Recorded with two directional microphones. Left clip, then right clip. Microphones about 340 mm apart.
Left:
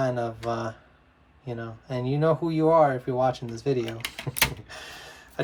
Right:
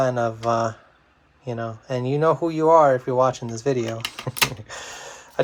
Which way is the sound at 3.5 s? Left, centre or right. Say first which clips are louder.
Right 4 dB; centre.